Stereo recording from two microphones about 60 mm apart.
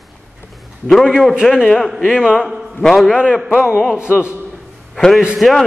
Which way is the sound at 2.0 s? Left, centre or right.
Centre.